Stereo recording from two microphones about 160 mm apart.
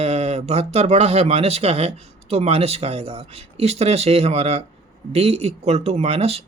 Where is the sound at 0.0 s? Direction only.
40° right (ahead or behind).